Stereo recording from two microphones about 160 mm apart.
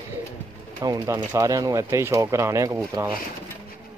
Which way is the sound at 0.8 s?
25° right (ahead or behind).